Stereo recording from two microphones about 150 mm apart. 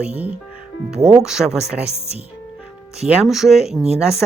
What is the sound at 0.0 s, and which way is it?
Speech, 10° right (ahead or behind).